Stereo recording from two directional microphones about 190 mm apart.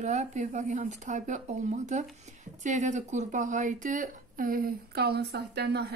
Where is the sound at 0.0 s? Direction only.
35° right (ahead or behind).